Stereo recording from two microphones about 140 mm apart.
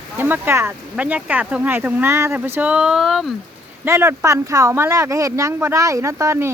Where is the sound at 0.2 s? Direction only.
15° right (ahead or behind).